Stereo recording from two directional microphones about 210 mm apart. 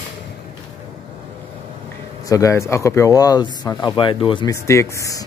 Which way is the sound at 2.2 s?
15° left (ahead or behind).